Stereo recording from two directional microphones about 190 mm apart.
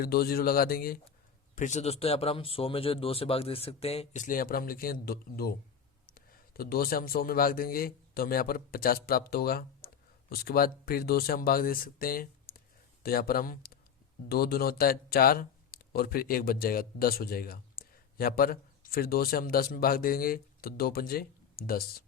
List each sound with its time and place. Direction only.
0.0 s speech: 50° left (ahead or behind)
1.5 s speech: 40° left (ahead or behind)